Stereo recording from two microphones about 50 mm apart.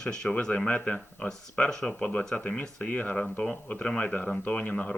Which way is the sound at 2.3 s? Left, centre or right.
Centre.